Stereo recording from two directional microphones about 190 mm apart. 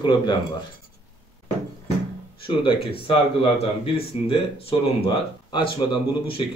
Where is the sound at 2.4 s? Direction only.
25° left (ahead or behind).